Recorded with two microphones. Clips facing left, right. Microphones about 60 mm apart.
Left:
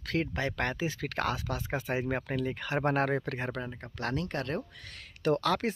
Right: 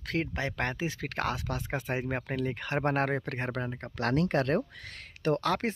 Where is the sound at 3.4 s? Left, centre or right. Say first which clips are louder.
Right 2 dB; right.